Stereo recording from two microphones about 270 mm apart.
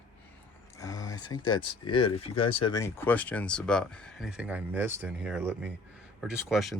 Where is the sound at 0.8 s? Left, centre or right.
Centre.